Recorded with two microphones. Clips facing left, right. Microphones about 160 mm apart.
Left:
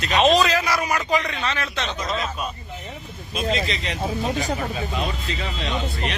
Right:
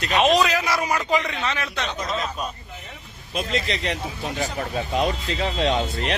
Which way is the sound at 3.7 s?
55° right (ahead or behind).